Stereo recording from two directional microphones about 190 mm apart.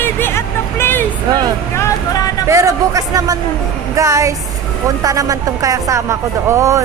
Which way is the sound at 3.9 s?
15° right (ahead or behind).